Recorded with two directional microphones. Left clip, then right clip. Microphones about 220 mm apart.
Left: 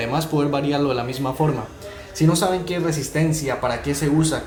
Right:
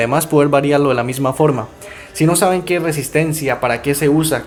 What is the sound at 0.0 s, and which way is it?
Speech, 40° right (ahead or behind).